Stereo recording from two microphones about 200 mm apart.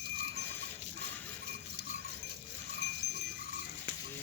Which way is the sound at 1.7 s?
55° right (ahead or behind).